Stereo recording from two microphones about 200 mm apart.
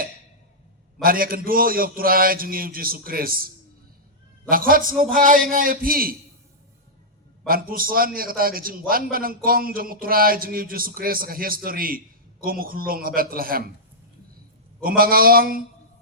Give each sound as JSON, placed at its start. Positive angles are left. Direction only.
{"t": 1.0, "sound": "speech", "side_deg": -45}
{"t": 7.4, "sound": "speech", "side_deg": -45}
{"t": 14.8, "sound": "speech", "side_deg": -45}